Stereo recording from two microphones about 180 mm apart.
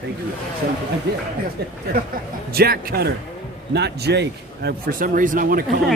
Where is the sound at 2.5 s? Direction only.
55° right (ahead or behind).